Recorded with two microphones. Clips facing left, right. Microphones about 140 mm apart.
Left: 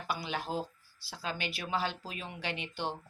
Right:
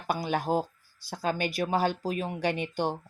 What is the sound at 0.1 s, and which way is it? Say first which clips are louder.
Speech: right 8 dB; 50° right (ahead or behind).